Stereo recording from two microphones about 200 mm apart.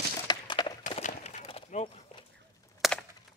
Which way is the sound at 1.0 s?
35° left (ahead or behind).